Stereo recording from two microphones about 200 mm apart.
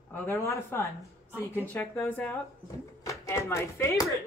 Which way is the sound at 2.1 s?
10° left (ahead or behind).